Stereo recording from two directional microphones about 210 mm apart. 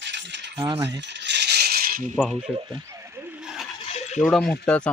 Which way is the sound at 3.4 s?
5° right (ahead or behind).